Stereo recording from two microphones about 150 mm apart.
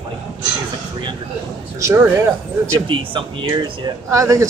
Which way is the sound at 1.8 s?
20° right (ahead or behind).